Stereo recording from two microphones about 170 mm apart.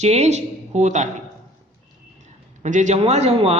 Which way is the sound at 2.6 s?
45° right (ahead or behind).